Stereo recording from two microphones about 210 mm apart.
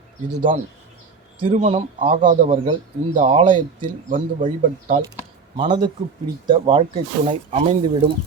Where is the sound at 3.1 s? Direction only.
30° right (ahead or behind).